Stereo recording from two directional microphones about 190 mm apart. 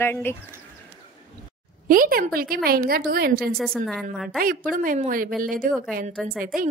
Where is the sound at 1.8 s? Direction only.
50° right (ahead or behind).